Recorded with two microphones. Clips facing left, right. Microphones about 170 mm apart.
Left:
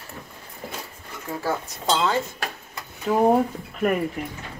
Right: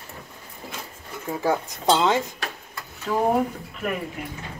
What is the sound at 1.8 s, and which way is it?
Speech, 20° right (ahead or behind).